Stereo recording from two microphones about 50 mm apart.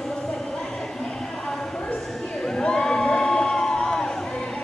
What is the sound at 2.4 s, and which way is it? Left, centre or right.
Crowd, centre.